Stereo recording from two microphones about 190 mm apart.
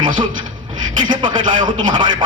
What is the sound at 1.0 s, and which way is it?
Speech, 25° right (ahead or behind).